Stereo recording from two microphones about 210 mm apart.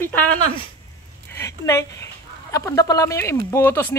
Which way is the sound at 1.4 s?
15° left (ahead or behind).